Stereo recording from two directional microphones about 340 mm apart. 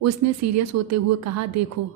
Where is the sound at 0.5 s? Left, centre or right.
Right.